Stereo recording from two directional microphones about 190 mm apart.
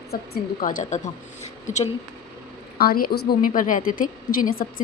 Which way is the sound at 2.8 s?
50° left (ahead or behind).